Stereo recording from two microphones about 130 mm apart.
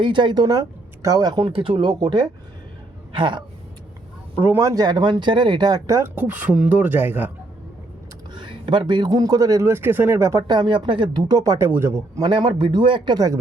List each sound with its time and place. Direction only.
0.0 s speech: 35° right (ahead or behind)
1.5 s speech: 40° right (ahead or behind)
4.4 s speech: 15° right (ahead or behind)
6.1 s speech: 10° right (ahead or behind)
8.3 s speech: 40° right (ahead or behind); by 11.9 s 20° right (ahead or behind)
12.1 s speech: 35° right (ahead or behind)